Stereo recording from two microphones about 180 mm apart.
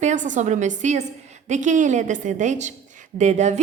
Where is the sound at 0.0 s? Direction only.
45° right (ahead or behind).